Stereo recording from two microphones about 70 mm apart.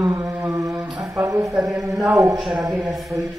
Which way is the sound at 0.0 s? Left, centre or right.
Right.